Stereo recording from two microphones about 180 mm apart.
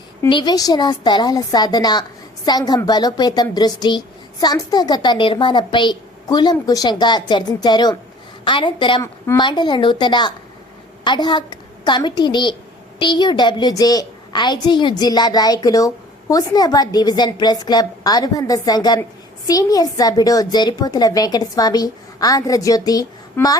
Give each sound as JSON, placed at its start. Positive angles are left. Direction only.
{"t": 0.3, "sound": "a woman's voice", "side_deg": 25}